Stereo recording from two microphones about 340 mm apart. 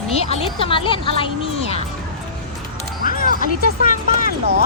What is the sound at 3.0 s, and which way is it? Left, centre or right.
Speech, left.